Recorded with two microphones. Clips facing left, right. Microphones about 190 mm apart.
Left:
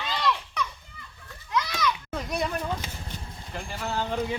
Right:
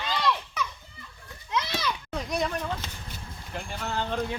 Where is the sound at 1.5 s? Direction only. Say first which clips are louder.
Left 2 dB; 30° right (ahead or behind).